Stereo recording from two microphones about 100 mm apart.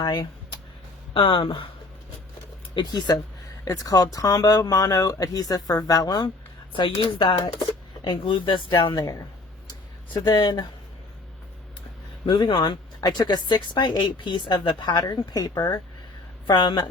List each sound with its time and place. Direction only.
0.0 s speech: 50° left (ahead or behind)
1.1 s speech: 60° left (ahead or behind)
2.7 s speech: 45° left (ahead or behind)
6.7 s speech: 60° left (ahead or behind); by 9.2 s 40° left (ahead or behind)
10.2 s speech: 45° left (ahead or behind)
12.2 s speech: 55° left (ahead or behind)